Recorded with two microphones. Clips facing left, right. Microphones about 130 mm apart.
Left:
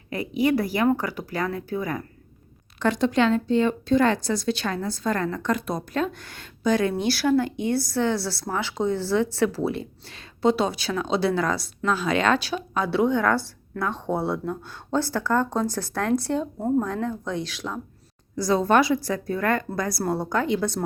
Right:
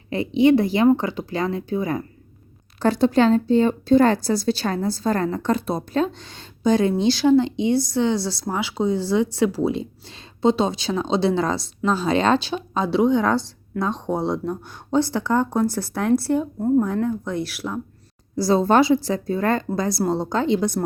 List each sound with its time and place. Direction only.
0.1 s speech: 25° right (ahead or behind)
2.7 s a woman's voice: 35° right (ahead or behind); by 17.7 s 10° right (ahead or behind)
18.3 s speech: 30° right (ahead or behind)